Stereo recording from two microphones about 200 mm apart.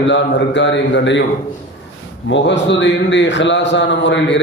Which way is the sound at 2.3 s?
60° left (ahead or behind).